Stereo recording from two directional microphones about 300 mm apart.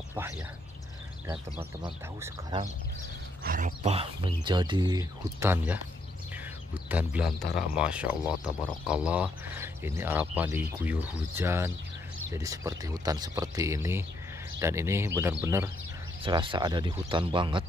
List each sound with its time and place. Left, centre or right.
1.3 s speech: centre
7.4 s speech: left
7.7 s speech: centre